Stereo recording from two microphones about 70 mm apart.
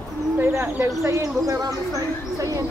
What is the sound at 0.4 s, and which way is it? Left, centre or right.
Speech, right.